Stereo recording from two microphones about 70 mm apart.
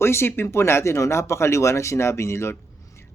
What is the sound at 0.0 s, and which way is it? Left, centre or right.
Speech, left.